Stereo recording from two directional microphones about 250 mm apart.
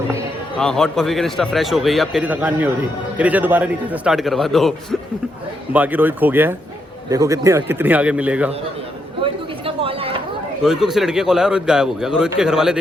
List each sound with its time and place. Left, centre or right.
0.6 s a man's voice: centre
9.2 s chatter: right
10.6 s a man's voice: centre